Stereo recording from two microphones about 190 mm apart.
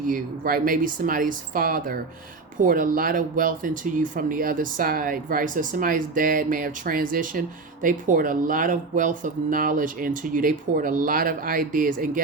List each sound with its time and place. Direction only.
0.1 s speech: 50° right (ahead or behind)